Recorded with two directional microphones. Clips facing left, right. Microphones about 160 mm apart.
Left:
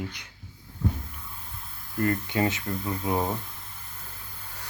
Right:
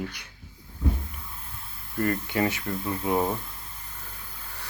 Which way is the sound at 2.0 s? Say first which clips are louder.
Even; 20° left (ahead or behind).